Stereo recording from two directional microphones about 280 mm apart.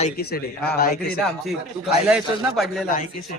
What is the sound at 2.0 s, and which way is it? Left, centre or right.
Speech, centre.